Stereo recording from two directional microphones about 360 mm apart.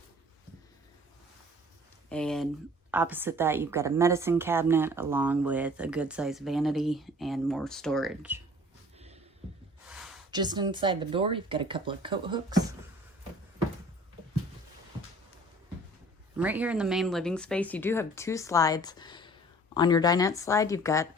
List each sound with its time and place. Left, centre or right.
2.0 s a woman's voice: centre
9.8 s speech: centre
16.4 s speech: centre